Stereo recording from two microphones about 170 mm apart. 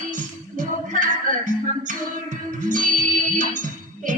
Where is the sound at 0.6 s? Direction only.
50° right (ahead or behind).